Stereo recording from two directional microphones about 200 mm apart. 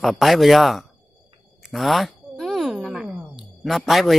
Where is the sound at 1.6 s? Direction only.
Centre (ahead or behind).